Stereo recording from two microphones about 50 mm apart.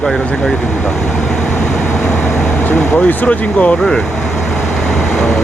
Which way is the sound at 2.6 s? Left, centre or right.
Left.